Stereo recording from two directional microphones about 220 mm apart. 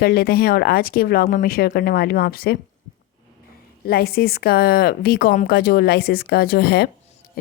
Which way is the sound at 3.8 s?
45° left (ahead or behind).